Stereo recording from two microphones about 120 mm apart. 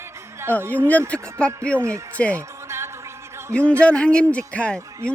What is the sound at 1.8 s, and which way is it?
Speech, 20° right (ahead or behind).